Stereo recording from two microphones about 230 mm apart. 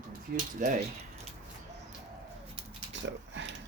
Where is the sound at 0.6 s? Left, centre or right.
Right.